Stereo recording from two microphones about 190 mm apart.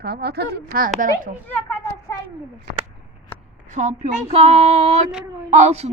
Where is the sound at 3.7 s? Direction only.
40° right (ahead or behind).